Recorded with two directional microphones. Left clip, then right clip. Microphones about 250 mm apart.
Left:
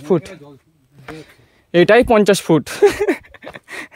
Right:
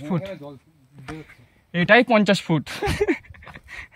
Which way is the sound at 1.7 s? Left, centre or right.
Centre.